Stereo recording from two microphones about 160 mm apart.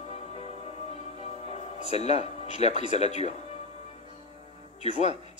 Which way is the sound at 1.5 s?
40° left (ahead or behind).